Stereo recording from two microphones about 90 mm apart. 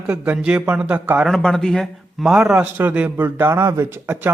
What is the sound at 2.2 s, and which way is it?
A man's voice, 10° right (ahead or behind).